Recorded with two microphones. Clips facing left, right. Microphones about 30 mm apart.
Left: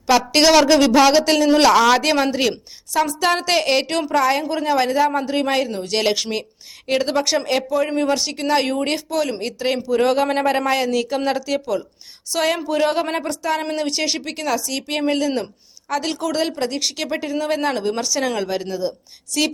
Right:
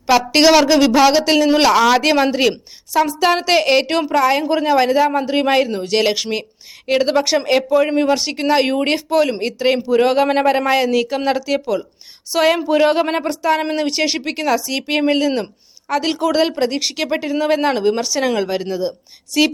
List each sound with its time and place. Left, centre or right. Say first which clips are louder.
0.1 s a woman's voice: right 2 dB; centre